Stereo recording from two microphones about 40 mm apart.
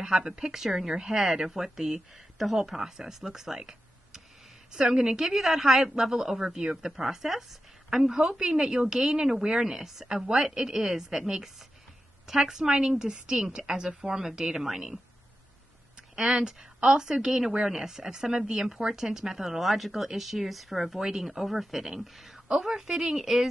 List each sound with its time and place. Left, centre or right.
0.0 s a woman's voice: centre
5.3 s speech: centre
16.2 s speech: centre